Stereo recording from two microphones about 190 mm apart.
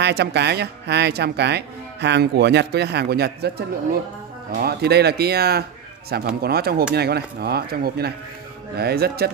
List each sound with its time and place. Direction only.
0.0 s speech: 60° right (ahead or behind)